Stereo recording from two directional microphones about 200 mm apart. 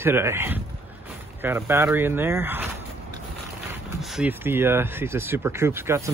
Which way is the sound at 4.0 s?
5° right (ahead or behind).